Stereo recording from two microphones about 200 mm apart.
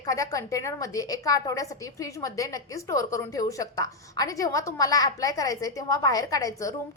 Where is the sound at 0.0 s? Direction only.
15° left (ahead or behind).